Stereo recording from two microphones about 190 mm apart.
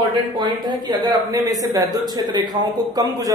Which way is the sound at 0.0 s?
25° right (ahead or behind).